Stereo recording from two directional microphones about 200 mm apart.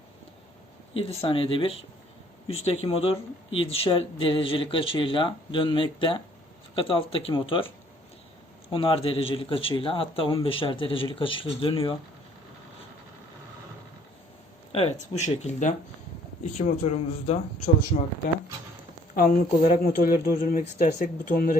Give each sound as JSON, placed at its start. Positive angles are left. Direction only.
{"t": 0.9, "sound": "a man's voice", "side_deg": 30}
{"t": 8.7, "sound": "a man's voice", "side_deg": 25}
{"t": 14.7, "sound": "speech", "side_deg": 30}
{"t": 19.1, "sound": "speech", "side_deg": 45}